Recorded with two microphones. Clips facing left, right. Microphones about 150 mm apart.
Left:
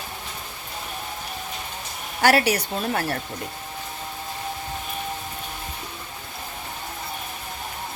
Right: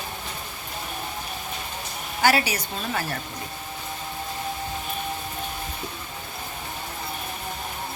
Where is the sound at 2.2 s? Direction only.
65° left (ahead or behind).